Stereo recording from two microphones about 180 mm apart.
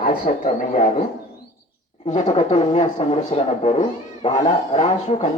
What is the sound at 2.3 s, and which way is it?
Speech, 35° left (ahead or behind).